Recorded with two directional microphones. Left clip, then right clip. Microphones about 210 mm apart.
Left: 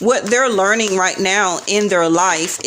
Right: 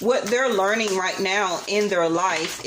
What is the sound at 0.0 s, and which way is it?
Speech, 50° left (ahead or behind).